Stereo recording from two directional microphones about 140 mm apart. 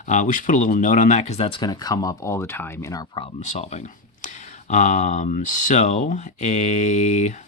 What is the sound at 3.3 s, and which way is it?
Speech, 55° left (ahead or behind).